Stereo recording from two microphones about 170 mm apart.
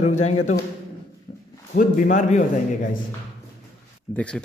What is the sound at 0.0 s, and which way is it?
Speech, 40° left (ahead or behind).